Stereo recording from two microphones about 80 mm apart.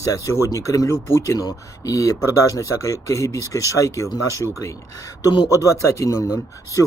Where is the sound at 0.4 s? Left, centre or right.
Left.